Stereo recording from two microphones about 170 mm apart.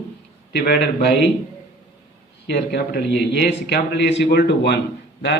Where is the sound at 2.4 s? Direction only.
75° left (ahead or behind).